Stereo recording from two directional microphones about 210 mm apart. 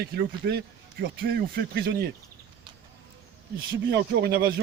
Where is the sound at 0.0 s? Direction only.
50° right (ahead or behind).